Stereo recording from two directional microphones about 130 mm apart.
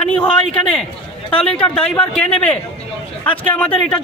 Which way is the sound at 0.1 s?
10° left (ahead or behind).